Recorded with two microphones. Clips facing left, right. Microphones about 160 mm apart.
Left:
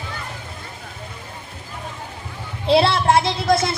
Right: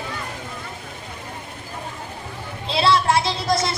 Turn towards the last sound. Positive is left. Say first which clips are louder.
# left 3 dB
turn(degrees=55)  # may be behind; listen again after turning